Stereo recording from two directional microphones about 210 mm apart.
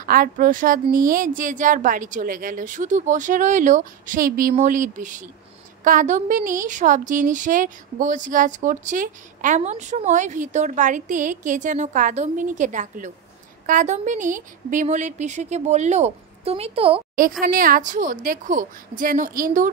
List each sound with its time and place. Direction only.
0.0 s a woman's voice: 40° right (ahead or behind); by 17.0 s 25° right (ahead or behind)
17.4 s a woman's voice: 40° right (ahead or behind)